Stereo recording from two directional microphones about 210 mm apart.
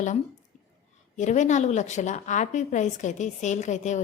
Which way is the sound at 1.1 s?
35° left (ahead or behind).